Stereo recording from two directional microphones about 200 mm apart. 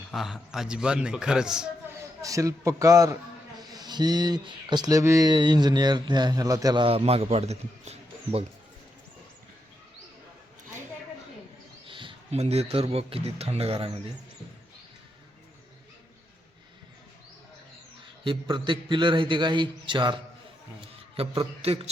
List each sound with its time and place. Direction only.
0.1 s a man's voice: centre (ahead or behind)
2.2 s a man's voice: 15° right (ahead or behind); by 8.4 s 30° right (ahead or behind)
11.9 s speech: 25° right (ahead or behind)
18.3 s speech: 25° right (ahead or behind)
21.2 s speech: 30° right (ahead or behind)